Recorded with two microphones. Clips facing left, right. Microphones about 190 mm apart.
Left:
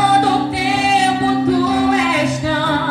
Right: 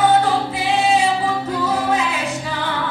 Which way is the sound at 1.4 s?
75° left (ahead or behind).